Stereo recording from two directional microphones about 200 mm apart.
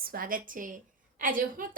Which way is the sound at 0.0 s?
45° right (ahead or behind).